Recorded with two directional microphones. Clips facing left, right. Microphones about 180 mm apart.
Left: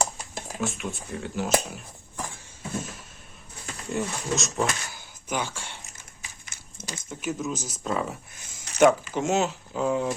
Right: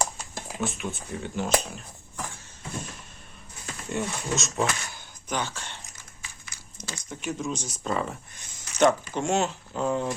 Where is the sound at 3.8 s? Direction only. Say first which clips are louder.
Left 1 dB; centre (ahead or behind).